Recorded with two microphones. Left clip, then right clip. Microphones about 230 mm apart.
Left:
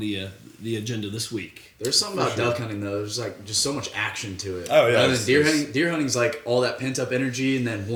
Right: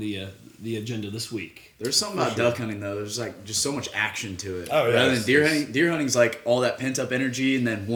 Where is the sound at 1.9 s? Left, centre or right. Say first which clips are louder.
Left 1 dB; right.